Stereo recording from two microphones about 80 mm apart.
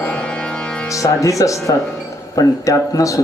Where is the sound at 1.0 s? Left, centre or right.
Left.